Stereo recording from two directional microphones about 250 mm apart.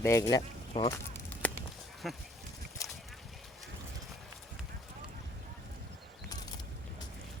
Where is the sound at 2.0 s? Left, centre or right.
Centre.